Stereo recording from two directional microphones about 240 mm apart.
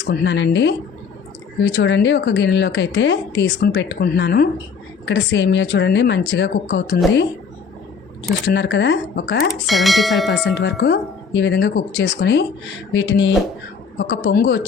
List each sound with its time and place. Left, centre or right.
0.0 s speech: left
8.4 s speech: left
9.5 s bell: centre
10.4 s speech: left